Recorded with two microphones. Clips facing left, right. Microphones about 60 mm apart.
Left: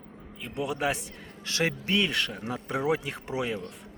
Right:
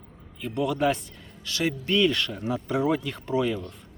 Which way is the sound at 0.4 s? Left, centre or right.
Centre.